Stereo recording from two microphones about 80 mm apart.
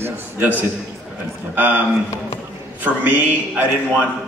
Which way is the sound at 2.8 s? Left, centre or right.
Right.